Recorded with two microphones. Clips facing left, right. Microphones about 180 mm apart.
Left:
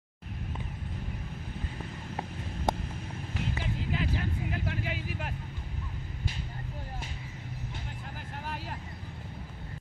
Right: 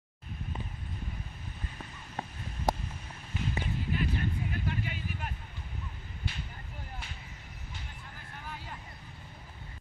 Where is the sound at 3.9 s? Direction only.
90° left.